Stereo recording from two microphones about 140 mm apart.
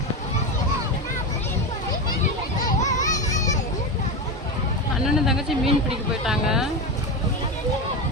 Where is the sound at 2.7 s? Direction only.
60° left (ahead or behind).